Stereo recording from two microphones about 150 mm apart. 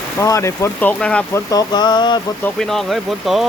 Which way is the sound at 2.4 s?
5° left (ahead or behind).